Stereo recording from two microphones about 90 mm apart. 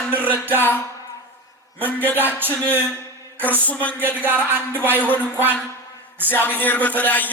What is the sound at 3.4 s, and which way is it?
Speech, 15° left (ahead or behind).